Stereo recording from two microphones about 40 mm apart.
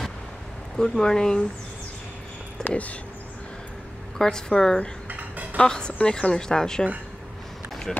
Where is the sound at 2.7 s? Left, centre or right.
Left.